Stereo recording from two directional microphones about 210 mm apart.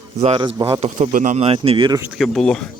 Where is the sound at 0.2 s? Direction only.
30° right (ahead or behind).